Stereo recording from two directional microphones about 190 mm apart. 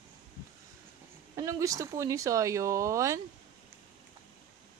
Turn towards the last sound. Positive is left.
turn(degrees=-15)  # may be behind; listen again after turning